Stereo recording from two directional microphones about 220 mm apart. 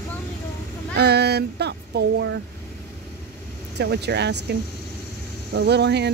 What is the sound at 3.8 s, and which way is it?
Speech, 50° right (ahead or behind).